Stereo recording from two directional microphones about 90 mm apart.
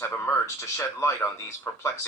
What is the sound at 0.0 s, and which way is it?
Speech, 30° left (ahead or behind).